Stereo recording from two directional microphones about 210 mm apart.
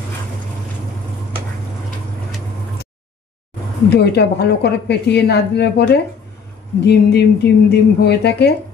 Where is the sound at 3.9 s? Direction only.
50° left (ahead or behind).